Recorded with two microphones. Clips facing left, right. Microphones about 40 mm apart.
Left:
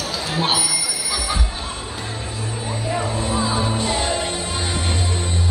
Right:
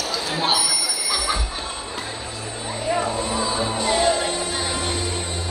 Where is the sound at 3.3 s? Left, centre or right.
Centre.